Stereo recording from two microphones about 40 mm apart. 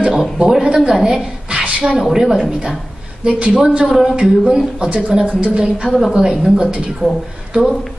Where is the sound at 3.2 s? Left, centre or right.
Right.